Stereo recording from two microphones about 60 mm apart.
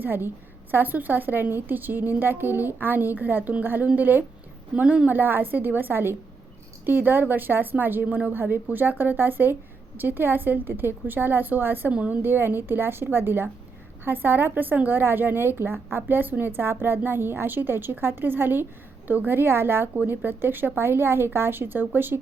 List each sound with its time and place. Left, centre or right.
0.0 s a woman's voice: right
4.7 s speech: centre
5.1 s a woman's voice: right
11.9 s speech: right
12.2 s a woman's voice: right